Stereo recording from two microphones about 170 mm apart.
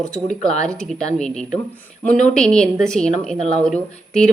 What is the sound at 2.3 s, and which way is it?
Speech, 5° left (ahead or behind).